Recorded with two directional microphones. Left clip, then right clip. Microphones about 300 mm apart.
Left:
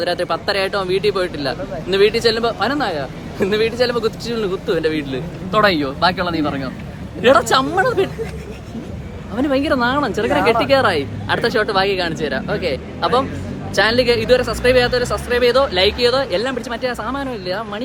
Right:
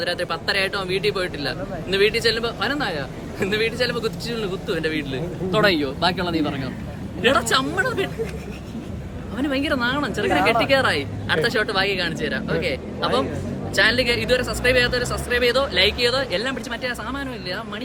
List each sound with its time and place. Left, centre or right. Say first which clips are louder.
0.0 s speech: left 5 dB; centre
5.5 s a man's voice: left 4 dB; centre
9.3 s speech: left 6 dB; centre